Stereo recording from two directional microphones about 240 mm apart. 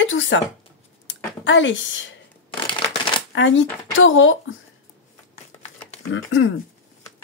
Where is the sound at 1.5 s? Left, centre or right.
Left.